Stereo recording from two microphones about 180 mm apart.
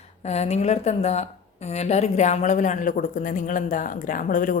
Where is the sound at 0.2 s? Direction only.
35° left (ahead or behind).